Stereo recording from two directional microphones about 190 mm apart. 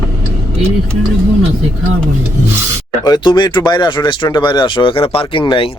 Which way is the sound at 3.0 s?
20° left (ahead or behind).